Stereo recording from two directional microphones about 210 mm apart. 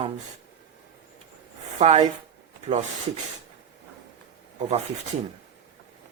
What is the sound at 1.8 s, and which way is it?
Speech, 35° right (ahead or behind).